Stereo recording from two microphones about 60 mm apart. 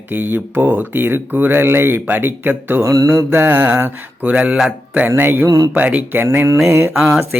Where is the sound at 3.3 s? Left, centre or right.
Right.